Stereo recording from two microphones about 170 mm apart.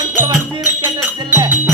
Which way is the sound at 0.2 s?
10° right (ahead or behind).